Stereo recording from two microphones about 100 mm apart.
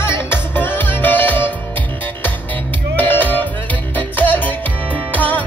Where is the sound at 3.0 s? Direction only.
20° left (ahead or behind).